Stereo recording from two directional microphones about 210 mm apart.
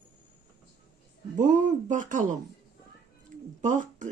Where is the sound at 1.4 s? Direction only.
35° right (ahead or behind).